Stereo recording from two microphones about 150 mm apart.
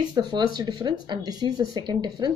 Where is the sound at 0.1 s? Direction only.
25° right (ahead or behind).